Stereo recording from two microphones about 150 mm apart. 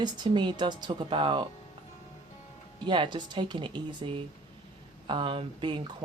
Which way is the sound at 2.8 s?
30° right (ahead or behind).